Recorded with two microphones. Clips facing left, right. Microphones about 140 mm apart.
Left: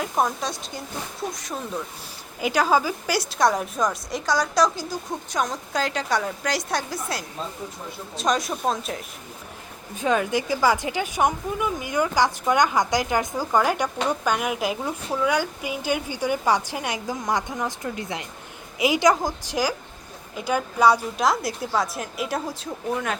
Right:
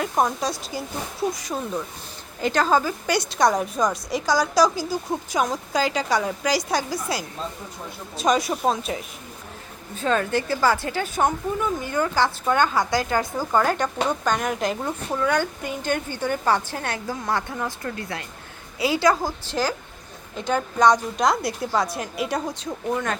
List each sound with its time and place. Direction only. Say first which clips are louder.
0.0 s a woman's voice: right 2 dB; centre (ahead or behind)
2.4 s a woman's voice: even; 10° left (ahead or behind)
9.9 s a woman's voice: even; 15° left (ahead or behind)